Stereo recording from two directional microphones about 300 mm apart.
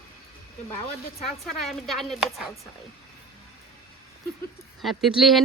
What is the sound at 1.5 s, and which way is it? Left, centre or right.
Speech, centre.